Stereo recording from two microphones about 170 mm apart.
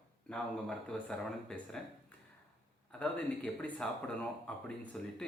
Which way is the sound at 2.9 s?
5° left (ahead or behind).